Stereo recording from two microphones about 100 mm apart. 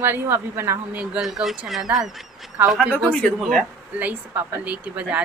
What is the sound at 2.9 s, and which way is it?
Speech, 15° left (ahead or behind).